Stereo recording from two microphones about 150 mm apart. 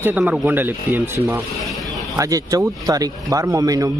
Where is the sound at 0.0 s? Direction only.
10° right (ahead or behind).